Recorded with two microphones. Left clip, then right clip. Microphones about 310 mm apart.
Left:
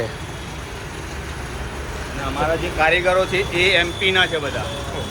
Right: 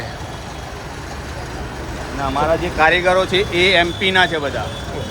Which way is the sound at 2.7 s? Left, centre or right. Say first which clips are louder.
Right 2 dB; right.